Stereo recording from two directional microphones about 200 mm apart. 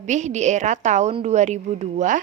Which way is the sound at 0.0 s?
35° right (ahead or behind).